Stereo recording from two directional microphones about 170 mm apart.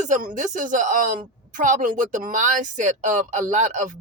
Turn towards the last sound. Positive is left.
turn(degrees=-45)  # may be behind; listen again after turning